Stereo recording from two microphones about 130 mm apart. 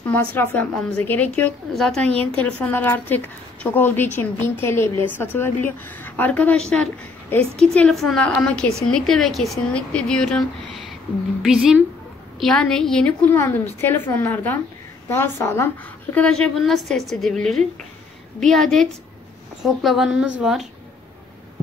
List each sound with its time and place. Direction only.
0.0 s a woman's voice: 10° left (ahead or behind)
13.3 s a woman's voice: 15° left (ahead or behind)
16.2 s speech: 5° left (ahead or behind)